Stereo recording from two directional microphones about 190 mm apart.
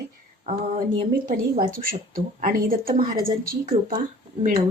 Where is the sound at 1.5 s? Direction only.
45° right (ahead or behind).